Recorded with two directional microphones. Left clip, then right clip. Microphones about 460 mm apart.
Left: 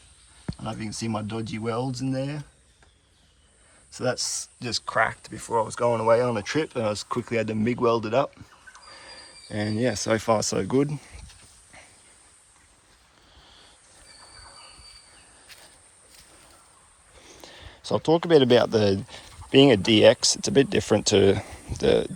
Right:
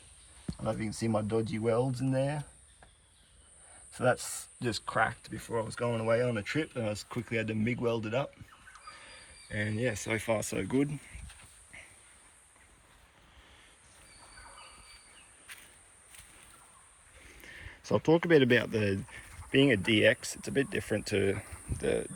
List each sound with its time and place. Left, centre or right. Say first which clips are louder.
0.5 s speech: left 1 dB; centre
3.9 s speech: left 2 dB; centre
9.6 s speech: left 7 dB; centre
17.5 s a sound: left 2 dB; left
17.8 s speech: left 4 dB; centre